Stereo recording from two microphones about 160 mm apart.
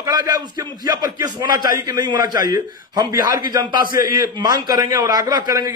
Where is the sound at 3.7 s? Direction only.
60° left (ahead or behind).